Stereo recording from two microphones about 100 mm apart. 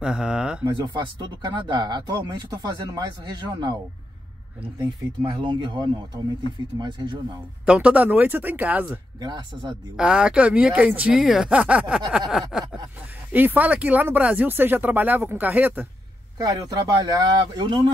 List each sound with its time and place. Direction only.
0.0 s a sound: 10° right (ahead or behind)
0.7 s speech: 50° right (ahead or behind)
4.8 s speech: 50° right (ahead or behind)
7.6 s speech: 10° right (ahead or behind)
9.2 s speech: 50° right (ahead or behind)
9.9 s speech: 10° right (ahead or behind)
12.2 s a sound: 5° right (ahead or behind)
13.3 s speech: 20° right (ahead or behind)
16.4 s speech: 40° right (ahead or behind)